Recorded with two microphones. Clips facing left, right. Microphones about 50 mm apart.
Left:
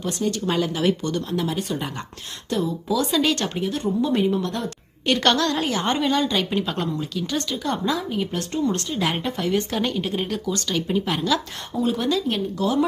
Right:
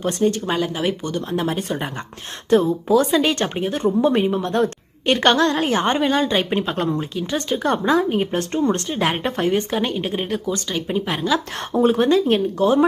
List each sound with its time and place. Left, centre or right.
0.0 s a woman's voice: right
0.4 s speech: centre
1.3 s a woman's voice: right
3.1 s a woman's voice: right
7.5 s a woman's voice: right
9.6 s speech: right
11.7 s a woman's voice: right